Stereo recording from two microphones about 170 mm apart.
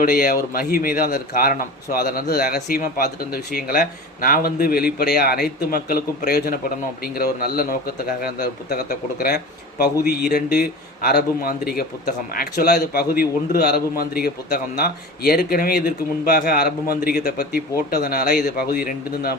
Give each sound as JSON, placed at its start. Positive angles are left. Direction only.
{"t": 0.0, "sound": "a man's voice", "side_deg": 60}